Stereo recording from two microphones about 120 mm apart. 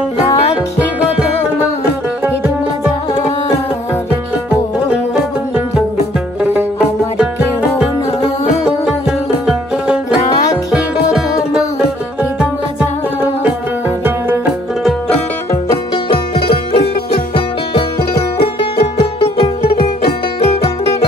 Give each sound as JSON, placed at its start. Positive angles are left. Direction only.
{"t": 7.2, "sound": "music", "side_deg": -10}
{"t": 10.7, "sound": "music", "side_deg": -5}
{"t": 13.2, "sound": "music", "side_deg": -15}
{"t": 16.1, "sound": "music", "side_deg": 50}
{"t": 18.4, "sound": "music", "side_deg": 55}